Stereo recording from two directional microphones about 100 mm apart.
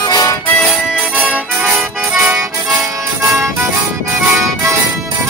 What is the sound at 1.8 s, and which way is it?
Music, 5° right (ahead or behind).